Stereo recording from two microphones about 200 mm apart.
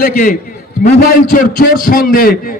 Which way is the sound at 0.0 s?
45° left (ahead or behind).